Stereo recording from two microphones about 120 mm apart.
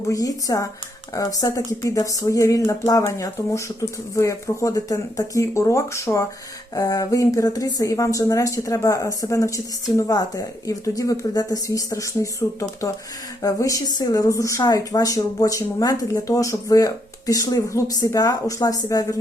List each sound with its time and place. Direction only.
0.1 s speech: 30° left (ahead or behind)